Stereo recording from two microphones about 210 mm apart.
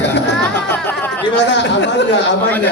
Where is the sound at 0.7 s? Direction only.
10° left (ahead or behind).